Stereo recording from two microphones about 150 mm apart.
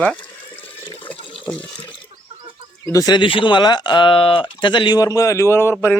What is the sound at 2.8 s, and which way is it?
Speech, 25° left (ahead or behind).